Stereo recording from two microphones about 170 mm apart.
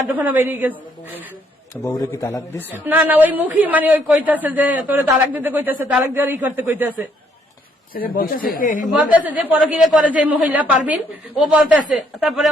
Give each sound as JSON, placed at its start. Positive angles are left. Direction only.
{"t": 0.0, "sound": "speech", "side_deg": -10}
{"t": 1.7, "sound": "speech", "side_deg": 15}
{"t": 2.8, "sound": "speech", "side_deg": -10}
{"t": 7.9, "sound": "speech", "side_deg": 55}
{"t": 8.9, "sound": "speech", "side_deg": -10}